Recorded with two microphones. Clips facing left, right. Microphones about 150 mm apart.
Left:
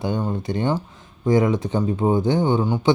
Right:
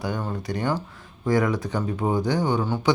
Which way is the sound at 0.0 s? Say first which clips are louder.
Left 4 dB; 20° left (ahead or behind).